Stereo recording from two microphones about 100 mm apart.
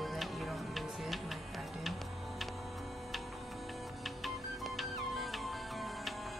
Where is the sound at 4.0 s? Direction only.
Centre (ahead or behind).